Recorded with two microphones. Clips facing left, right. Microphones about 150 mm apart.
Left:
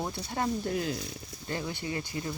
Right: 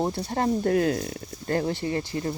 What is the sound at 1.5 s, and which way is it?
Speech, 45° right (ahead or behind).